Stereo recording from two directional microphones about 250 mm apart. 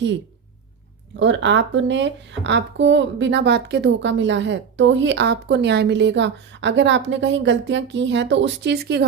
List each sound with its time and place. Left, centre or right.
1.1 s speech: right